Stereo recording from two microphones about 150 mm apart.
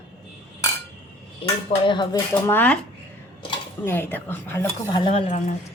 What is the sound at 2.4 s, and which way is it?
Speech, 10° left (ahead or behind).